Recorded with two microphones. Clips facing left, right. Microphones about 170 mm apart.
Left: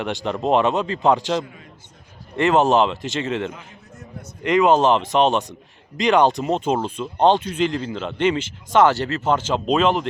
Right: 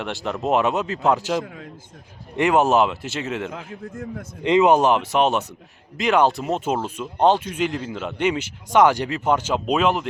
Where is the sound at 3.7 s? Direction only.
90° right.